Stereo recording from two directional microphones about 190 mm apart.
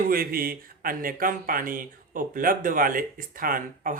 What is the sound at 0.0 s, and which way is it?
Speech, 50° right (ahead or behind).